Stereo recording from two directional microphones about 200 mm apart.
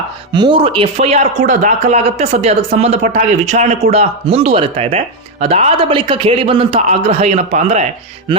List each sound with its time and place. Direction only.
0.3 s speech: 25° right (ahead or behind)